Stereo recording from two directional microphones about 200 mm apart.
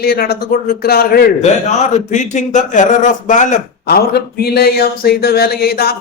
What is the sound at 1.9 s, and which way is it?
Speech, 35° left (ahead or behind).